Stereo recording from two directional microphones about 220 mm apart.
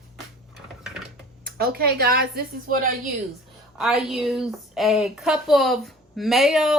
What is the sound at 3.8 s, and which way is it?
A woman's voice, centre (ahead or behind).